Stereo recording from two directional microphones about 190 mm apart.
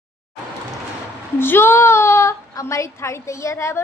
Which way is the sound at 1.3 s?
10° left (ahead or behind).